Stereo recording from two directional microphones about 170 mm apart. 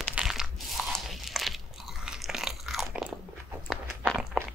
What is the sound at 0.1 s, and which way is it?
Crunch, 5° right (ahead or behind).